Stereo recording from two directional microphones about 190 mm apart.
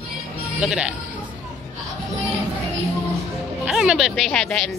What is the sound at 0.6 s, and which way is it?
Speech, 5° right (ahead or behind).